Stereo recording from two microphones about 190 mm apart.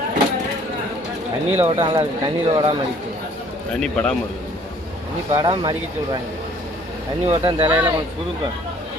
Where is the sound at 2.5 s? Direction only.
25° right (ahead or behind).